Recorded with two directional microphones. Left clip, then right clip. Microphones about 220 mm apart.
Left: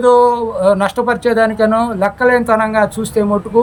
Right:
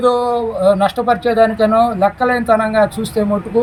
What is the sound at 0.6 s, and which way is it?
Speech, 5° left (ahead or behind).